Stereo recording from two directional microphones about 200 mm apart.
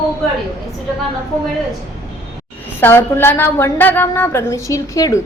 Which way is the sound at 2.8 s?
10° left (ahead or behind).